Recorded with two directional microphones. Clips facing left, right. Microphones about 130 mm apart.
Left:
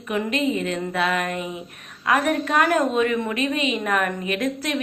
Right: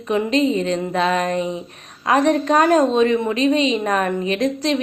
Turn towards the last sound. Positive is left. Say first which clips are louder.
# right 5 dB
turn(degrees=-30)  # may be behind; listen again after turning